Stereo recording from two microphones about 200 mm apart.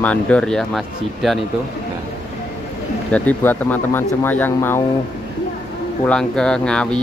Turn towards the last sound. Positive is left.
turn(degrees=5)  # may be behind; listen again after turning